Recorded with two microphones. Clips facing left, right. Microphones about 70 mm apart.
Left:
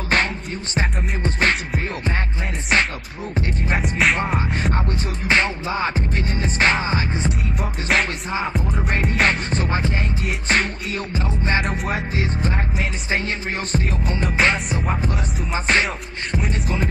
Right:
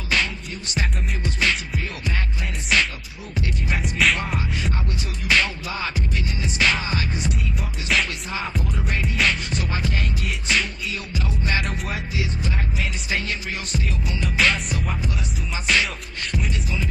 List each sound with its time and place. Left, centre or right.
0.1 s music: left
4.6 s music: left
7.9 s music: left
8.3 s music: left
8.8 s music: left
10.5 s music: left